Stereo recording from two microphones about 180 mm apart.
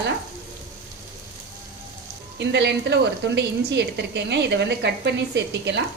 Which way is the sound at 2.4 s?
70° right (ahead or behind).